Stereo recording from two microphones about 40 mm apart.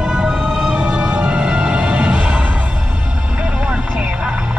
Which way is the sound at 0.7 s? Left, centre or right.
Right.